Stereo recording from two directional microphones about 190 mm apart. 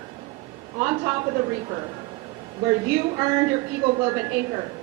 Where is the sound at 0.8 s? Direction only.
20° right (ahead or behind).